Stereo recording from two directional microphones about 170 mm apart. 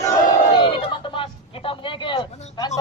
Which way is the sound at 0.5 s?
30° left (ahead or behind).